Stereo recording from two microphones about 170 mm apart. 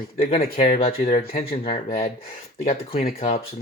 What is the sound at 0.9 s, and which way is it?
Speech, 35° left (ahead or behind).